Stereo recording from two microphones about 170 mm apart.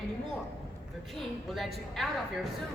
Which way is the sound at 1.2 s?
Centre (ahead or behind).